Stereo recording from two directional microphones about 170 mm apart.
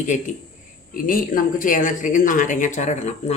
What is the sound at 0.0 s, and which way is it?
Speech, 45° left (ahead or behind).